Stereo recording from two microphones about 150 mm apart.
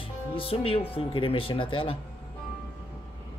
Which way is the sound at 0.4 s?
40° left (ahead or behind).